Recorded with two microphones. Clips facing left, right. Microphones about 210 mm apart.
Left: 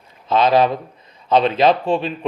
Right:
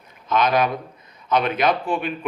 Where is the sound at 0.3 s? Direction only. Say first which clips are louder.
Left 5 dB; 30° left (ahead or behind).